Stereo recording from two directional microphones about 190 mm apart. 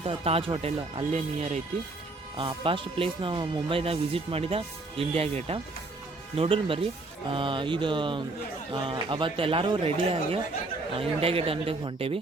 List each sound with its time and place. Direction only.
0.0 s speech: 30° right (ahead or behind)